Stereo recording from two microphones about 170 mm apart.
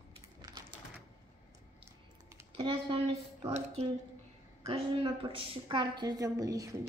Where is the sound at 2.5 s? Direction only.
35° right (ahead or behind).